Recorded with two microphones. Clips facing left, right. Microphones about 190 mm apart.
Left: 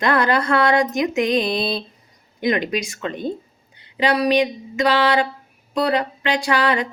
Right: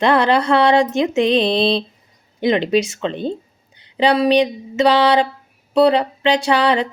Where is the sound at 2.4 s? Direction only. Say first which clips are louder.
Right 5 dB; 30° right (ahead or behind).